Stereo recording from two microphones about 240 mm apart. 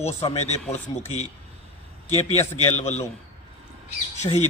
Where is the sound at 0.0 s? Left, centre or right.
Left.